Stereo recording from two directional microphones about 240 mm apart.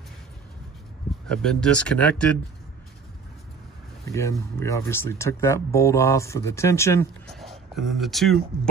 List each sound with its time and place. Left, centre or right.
1.2 s speech: centre
4.0 s speech: centre
7.3 s speech: centre